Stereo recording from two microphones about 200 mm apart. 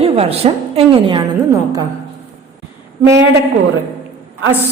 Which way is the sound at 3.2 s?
55° right (ahead or behind).